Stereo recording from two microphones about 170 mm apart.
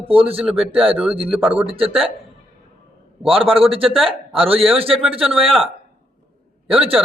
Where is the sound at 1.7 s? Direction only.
35° right (ahead or behind).